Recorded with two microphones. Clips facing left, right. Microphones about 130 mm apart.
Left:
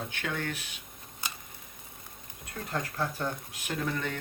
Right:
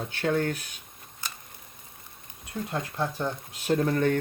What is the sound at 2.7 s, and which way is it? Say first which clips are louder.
Speech: right 2 dB; 20° right (ahead or behind).